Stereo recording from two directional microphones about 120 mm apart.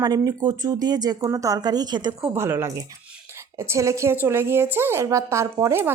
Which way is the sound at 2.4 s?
20° right (ahead or behind).